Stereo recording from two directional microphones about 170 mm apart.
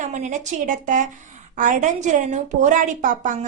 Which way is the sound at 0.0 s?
45° right (ahead or behind).